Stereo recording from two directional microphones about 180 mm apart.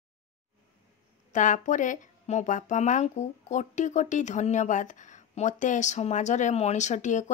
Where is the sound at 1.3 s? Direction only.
45° left (ahead or behind).